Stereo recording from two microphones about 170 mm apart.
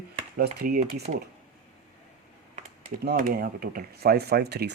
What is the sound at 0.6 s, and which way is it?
Speech, 60° right (ahead or behind).